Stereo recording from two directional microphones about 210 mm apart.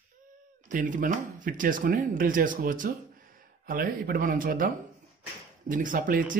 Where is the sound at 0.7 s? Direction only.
40° right (ahead or behind).